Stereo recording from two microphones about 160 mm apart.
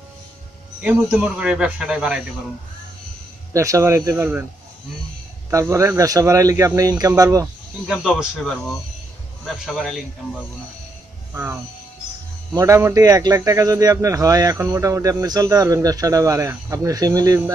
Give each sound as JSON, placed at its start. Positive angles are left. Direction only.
{"t": 1.1, "sound": "speech", "side_deg": -5}
{"t": 3.5, "sound": "speech", "side_deg": -20}
{"t": 5.5, "sound": "speech", "side_deg": -20}
{"t": 7.9, "sound": "speech", "side_deg": -5}
{"t": 12.5, "sound": "speech", "side_deg": -15}